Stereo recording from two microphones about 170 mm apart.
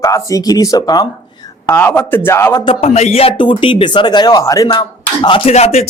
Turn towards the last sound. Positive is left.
turn(degrees=40)  # may be behind; listen again after turning